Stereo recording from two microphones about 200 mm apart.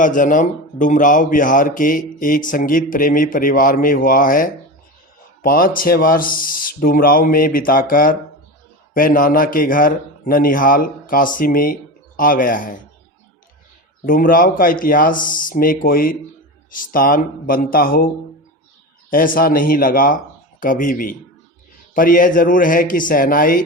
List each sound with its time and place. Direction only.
0.0 s a man's voice: 40° left (ahead or behind)
14.0 s a man's voice: 45° left (ahead or behind)
19.1 s a man's voice: 45° left (ahead or behind)